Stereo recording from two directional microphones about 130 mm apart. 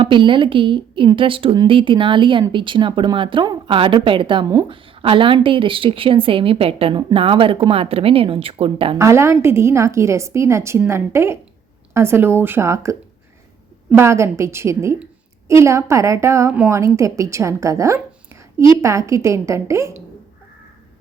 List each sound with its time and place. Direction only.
0.0 s a woman's voice: 40° right (ahead or behind)
9.0 s a woman's voice: 20° right (ahead or behind)